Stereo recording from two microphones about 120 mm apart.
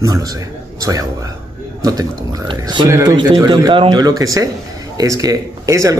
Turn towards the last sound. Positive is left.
turn(degrees=-25)  # may be behind; listen again after turning